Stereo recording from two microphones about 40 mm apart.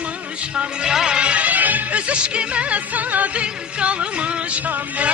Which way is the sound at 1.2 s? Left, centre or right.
Right.